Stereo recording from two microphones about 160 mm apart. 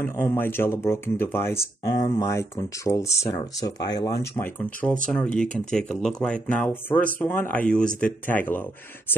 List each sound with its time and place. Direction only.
0.0 s speech: 15° left (ahead or behind)